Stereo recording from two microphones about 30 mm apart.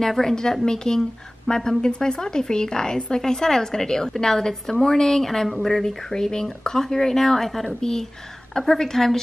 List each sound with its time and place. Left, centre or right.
0.2 s speech: centre